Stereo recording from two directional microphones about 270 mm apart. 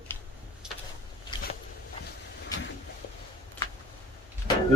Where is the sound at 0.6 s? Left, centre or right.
Centre.